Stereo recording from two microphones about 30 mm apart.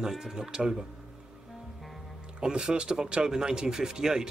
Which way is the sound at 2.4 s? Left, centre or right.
Right.